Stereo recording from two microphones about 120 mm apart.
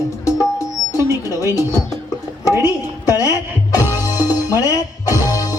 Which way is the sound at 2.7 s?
30° left (ahead or behind).